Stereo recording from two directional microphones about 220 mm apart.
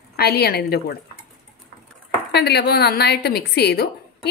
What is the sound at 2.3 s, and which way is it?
Speech, 50° left (ahead or behind).